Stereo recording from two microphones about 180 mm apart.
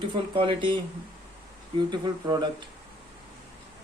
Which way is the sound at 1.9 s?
20° right (ahead or behind).